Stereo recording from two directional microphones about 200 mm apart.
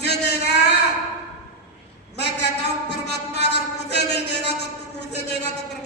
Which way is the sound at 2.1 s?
55° left (ahead or behind).